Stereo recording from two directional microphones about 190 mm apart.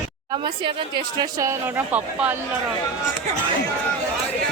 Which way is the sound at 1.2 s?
15° right (ahead or behind).